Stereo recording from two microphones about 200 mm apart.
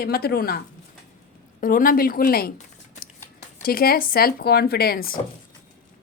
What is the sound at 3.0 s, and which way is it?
Speech, 45° left (ahead or behind).